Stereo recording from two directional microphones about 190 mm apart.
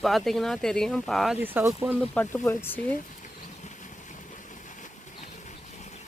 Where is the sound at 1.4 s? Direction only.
10° right (ahead or behind).